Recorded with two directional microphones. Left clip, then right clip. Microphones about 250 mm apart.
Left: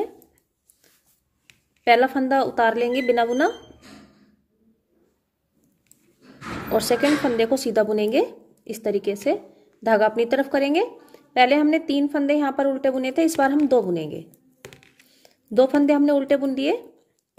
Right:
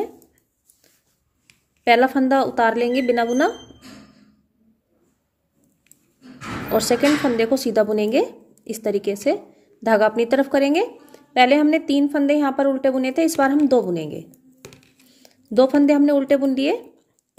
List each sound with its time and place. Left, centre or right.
1.9 s speech: centre
6.7 s speech: centre
14.3 s a sound: left
15.0 s speech: centre